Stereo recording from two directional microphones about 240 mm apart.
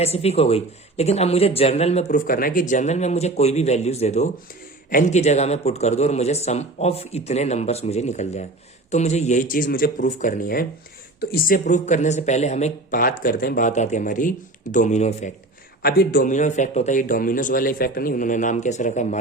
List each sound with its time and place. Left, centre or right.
0.0 s speech: left
15.8 s speech: left